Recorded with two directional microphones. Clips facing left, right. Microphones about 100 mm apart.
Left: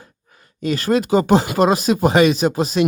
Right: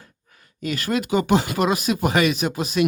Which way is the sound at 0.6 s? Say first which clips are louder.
Left 6 dB; 35° left (ahead or behind).